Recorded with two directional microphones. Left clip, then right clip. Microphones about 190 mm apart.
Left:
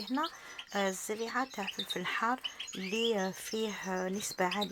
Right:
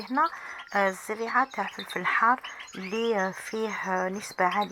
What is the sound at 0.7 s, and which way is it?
Speech, centre (ahead or behind).